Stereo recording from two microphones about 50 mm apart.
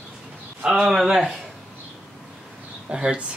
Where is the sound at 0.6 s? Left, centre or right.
Centre.